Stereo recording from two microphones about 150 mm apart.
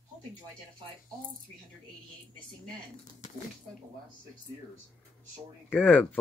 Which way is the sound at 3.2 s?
55° left (ahead or behind).